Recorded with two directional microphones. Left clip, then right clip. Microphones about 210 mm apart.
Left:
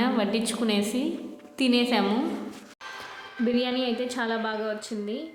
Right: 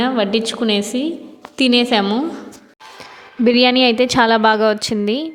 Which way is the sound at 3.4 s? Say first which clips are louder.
Right 14 dB; 45° right (ahead or behind).